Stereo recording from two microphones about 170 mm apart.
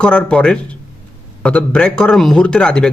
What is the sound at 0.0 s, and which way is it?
Speech, 5° left (ahead or behind).